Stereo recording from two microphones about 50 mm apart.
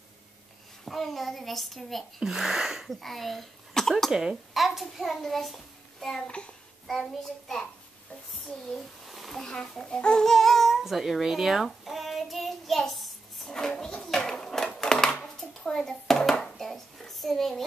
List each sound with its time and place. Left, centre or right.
0.8 s a child's voice: centre
3.0 s a child's voice: centre
4.1 s a child's voice: centre
6.2 s a child's voice: left
6.9 s child singing: centre
8.3 s babbling: centre